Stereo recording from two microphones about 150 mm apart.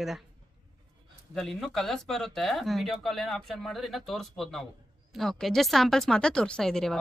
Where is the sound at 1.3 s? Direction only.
Centre (ahead or behind).